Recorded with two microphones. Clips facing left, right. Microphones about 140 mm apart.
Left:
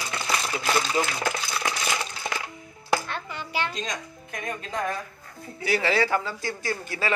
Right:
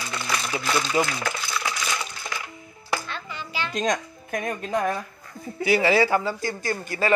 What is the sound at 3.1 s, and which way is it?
Music, 55° left (ahead or behind).